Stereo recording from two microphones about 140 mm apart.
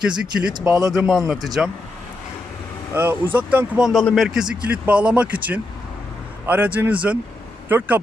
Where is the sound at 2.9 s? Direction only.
15° right (ahead or behind).